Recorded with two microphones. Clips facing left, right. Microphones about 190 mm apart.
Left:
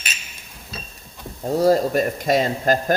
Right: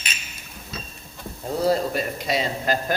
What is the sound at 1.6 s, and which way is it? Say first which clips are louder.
Speech: left 5 dB; 40° left (ahead or behind).